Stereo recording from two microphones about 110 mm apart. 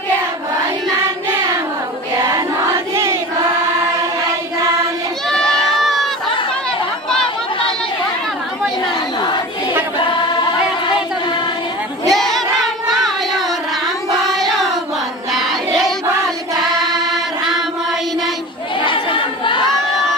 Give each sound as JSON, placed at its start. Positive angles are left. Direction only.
{"t": 2.2, "sound": "choir", "side_deg": -30}
{"t": 5.3, "sound": "crowd", "side_deg": 5}
{"t": 5.8, "sound": "a sound", "side_deg": 0}
{"t": 7.1, "sound": "chatter", "side_deg": 5}
{"t": 12.1, "sound": "child singing", "side_deg": 0}
{"t": 14.2, "sound": "child singing", "side_deg": 0}
{"t": 15.3, "sound": "music", "side_deg": 0}
{"t": 18.9, "sound": "crowd", "side_deg": 50}